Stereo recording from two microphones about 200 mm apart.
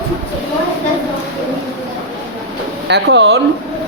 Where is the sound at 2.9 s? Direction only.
60° right (ahead or behind).